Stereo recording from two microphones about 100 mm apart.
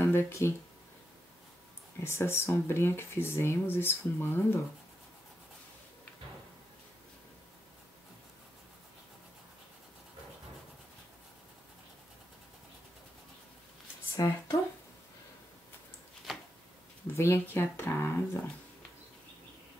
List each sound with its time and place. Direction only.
0.0 s speech: 25° left (ahead or behind)
2.0 s speech: 25° left (ahead or behind)
14.2 s speech: 35° left (ahead or behind)
16.3 s a sound: centre (ahead or behind)
17.1 s speech: 25° left (ahead or behind)